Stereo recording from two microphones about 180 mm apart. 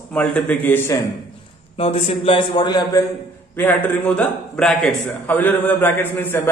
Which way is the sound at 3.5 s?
10° left (ahead or behind).